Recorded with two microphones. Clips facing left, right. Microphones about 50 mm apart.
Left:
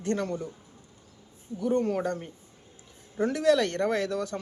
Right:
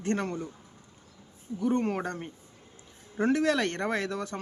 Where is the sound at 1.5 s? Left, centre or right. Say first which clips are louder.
Left 1 dB; right.